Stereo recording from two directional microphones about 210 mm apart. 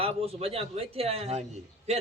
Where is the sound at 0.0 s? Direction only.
30° right (ahead or behind).